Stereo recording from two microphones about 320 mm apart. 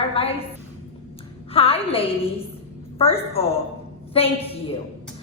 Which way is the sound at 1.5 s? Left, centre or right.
Centre.